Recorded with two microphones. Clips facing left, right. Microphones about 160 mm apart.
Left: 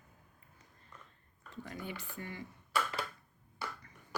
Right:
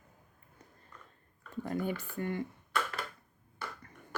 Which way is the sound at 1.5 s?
50° right (ahead or behind).